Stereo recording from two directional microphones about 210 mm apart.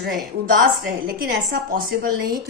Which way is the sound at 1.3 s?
45° right (ahead or behind).